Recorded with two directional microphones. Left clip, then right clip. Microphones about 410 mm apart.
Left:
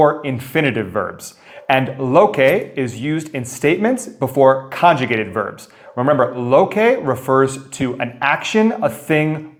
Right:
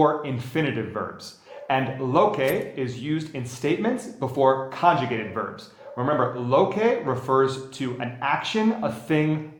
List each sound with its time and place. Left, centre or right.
0.0 s speech: left